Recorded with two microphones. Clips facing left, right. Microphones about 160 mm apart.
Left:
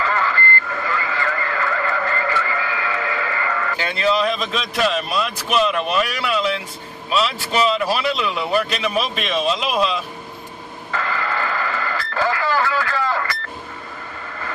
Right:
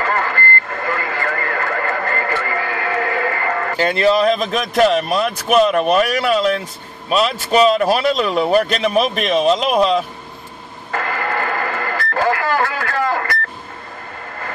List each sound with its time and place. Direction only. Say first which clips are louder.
0.0 s radio: right 2 dB; 50° right (ahead or behind)
7.1 s speech: right 5 dB; 45° right (ahead or behind)
10.9 s radio: right 3 dB; 50° right (ahead or behind)